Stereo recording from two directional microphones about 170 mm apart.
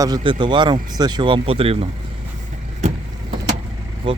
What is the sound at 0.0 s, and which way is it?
Speech, 25° right (ahead or behind).